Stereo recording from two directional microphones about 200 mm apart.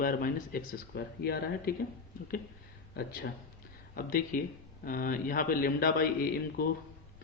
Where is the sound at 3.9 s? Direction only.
45° left (ahead or behind).